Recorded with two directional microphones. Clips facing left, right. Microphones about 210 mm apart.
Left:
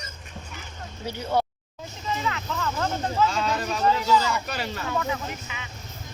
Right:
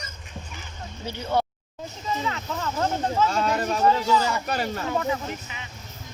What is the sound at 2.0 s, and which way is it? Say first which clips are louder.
Speech: even; 30° right (ahead or behind).